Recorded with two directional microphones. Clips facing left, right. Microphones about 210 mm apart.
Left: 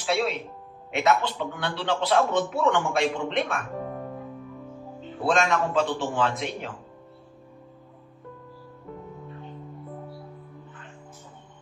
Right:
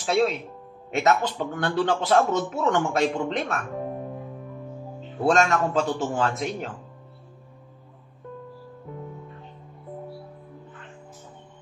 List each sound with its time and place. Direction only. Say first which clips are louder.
0.0 s a man's voice: right 3 dB; 45° right (ahead or behind)
5.2 s a man's voice: right 3 dB; 45° right (ahead or behind)